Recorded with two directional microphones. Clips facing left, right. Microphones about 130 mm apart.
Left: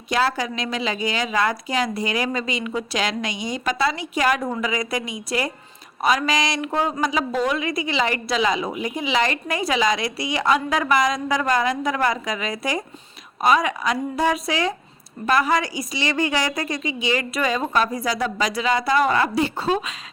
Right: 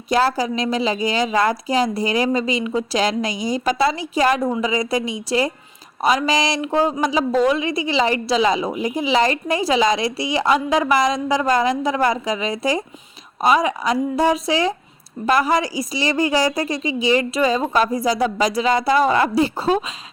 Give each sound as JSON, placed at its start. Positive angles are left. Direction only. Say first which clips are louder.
{"t": 0.1, "sound": "a woman's voice", "louder": "right 4 dB", "side_deg": -35}